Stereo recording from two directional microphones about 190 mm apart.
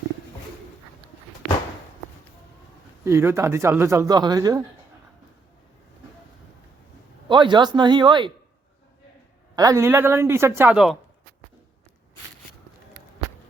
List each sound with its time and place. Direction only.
3.0 s speech: 15° right (ahead or behind)
7.3 s speech: 25° right (ahead or behind)
9.6 s speech: 15° right (ahead or behind)